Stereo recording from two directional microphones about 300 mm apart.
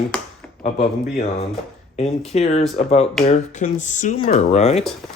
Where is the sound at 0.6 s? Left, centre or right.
Left.